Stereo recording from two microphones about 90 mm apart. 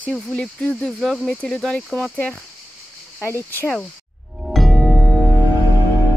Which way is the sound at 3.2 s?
25° left (ahead or behind).